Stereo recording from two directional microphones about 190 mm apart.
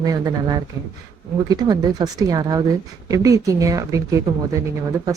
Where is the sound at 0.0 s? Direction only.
20° right (ahead or behind).